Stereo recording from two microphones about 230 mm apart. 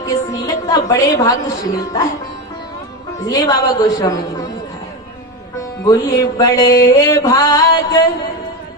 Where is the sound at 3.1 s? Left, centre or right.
Centre.